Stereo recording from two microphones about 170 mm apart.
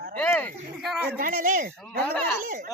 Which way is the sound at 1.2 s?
55° right (ahead or behind).